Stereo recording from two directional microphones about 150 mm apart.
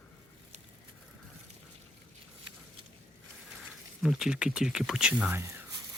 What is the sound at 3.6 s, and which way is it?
Speech, centre (ahead or behind).